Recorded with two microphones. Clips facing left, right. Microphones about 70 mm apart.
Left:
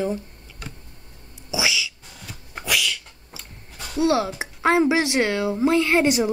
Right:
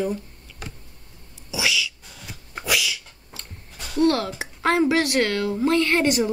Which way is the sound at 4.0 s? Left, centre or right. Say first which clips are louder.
Even; centre.